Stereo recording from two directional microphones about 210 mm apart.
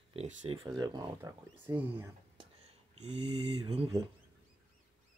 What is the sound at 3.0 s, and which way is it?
Speech, 25° right (ahead or behind).